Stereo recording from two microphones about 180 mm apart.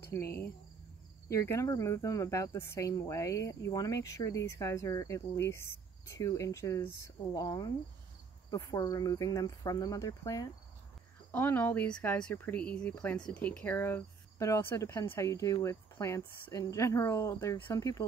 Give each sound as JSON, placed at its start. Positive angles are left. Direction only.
{"t": 0.0, "sound": "cricket", "side_deg": 15}
{"t": 1.3, "sound": "speech", "side_deg": 15}